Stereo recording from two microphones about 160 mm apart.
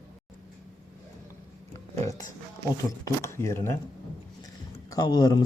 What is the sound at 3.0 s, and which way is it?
Speech, 15° left (ahead or behind).